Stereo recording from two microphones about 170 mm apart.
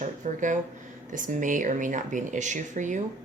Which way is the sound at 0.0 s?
45° right (ahead or behind).